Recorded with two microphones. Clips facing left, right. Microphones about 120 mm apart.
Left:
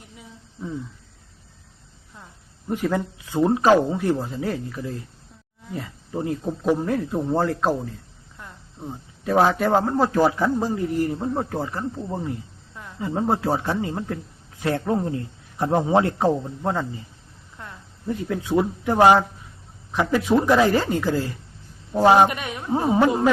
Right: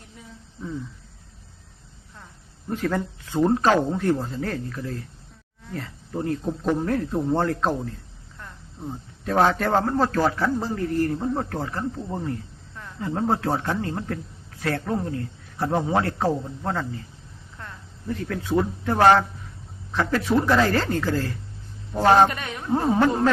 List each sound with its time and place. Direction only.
2.6 s a man's voice: 15° left (ahead or behind)
17.6 s cricket: 10° left (ahead or behind)
18.1 s speech: 15° left (ahead or behind)